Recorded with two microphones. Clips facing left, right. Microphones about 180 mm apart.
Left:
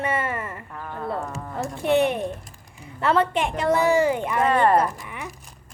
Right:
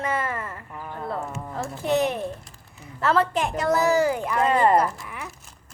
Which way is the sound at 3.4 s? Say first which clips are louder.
Left 1 dB; 5° right (ahead or behind).